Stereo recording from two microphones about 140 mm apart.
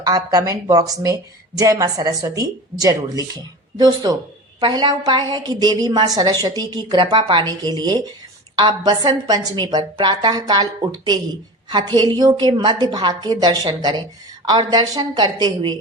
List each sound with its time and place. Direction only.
0.0 s speech: 25° right (ahead or behind)